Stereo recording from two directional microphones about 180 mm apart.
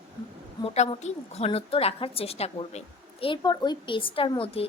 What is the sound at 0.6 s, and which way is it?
A woman's voice, 35° left (ahead or behind).